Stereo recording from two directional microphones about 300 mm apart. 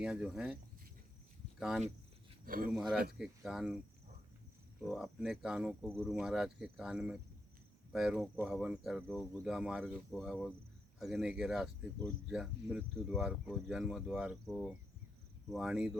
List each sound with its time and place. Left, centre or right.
0.0 s speech: centre
1.5 s speech: centre
2.4 s speech: right
2.7 s speech: centre
4.8 s speech: centre